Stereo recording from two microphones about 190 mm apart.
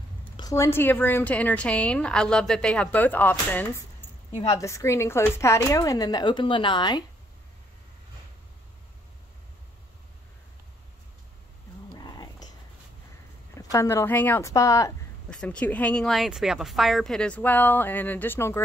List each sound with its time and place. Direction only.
0.4 s a woman's voice: 15° left (ahead or behind)
11.9 s a sound: 20° left (ahead or behind)
13.6 s a woman's voice: 15° left (ahead or behind)
15.2 s a woman's voice: 5° left (ahead or behind)